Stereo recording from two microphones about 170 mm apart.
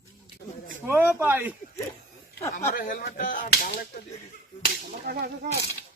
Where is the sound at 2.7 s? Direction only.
55° left (ahead or behind).